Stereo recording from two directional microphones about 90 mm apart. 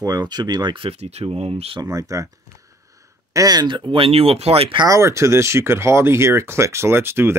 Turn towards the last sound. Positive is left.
turn(degrees=-25)  # may be behind; listen again after turning